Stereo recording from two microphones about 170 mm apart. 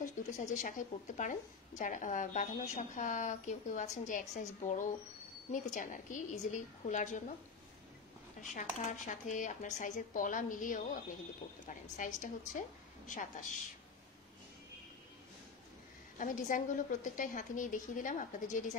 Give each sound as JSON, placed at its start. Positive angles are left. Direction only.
{"t": 0.4, "sound": "speech", "side_deg": 50}
{"t": 8.4, "sound": "speech", "side_deg": 45}
{"t": 12.0, "sound": "speech", "side_deg": 50}
{"t": 16.2, "sound": "speech", "side_deg": 50}